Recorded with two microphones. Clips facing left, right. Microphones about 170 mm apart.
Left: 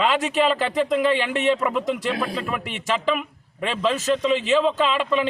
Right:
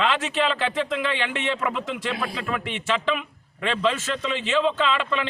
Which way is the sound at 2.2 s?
5° left (ahead or behind).